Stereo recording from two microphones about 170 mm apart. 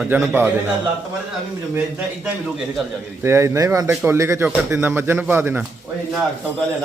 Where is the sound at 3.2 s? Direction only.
15° right (ahead or behind).